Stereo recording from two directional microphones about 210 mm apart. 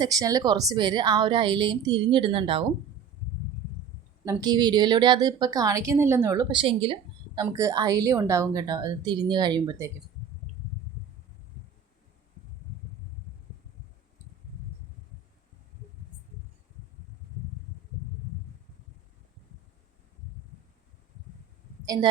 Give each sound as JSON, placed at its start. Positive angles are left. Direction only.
{"t": 0.0, "sound": "a woman's voice", "side_deg": -15}
{"t": 4.3, "sound": "a woman's voice", "side_deg": -20}